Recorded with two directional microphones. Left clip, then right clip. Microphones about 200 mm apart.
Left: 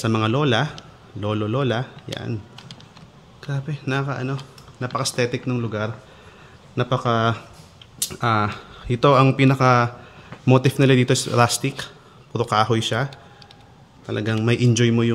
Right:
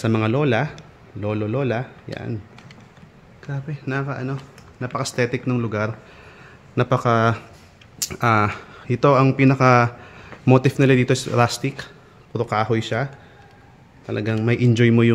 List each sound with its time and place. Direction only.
0.0 s speech: 10° right (ahead or behind)
3.4 s speech: 20° left (ahead or behind); by 9.8 s 15° right (ahead or behind)
10.4 s speech: 5° right (ahead or behind)